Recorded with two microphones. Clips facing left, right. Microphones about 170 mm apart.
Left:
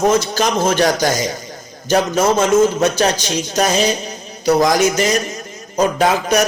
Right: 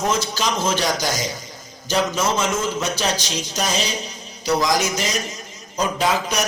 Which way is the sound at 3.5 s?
55° left (ahead or behind).